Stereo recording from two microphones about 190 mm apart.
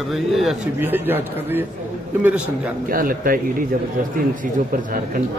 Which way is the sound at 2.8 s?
50° right (ahead or behind).